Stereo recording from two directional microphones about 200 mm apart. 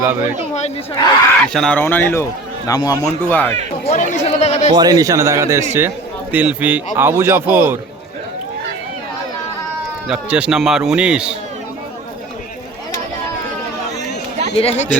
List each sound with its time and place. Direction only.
0.0 s a man's voice: 10° right (ahead or behind)
1.5 s speech: 5° left (ahead or behind)
3.8 s speech: 35° left (ahead or behind)
4.7 s a man's voice: 20° right (ahead or behind)
10.1 s a man's voice: 5° right (ahead or behind)
14.5 s speech: 30° left (ahead or behind)